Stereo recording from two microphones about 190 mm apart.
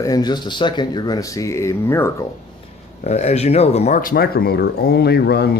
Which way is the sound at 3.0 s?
35° left (ahead or behind).